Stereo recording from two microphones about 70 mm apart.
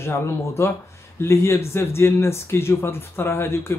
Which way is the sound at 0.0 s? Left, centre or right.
Left.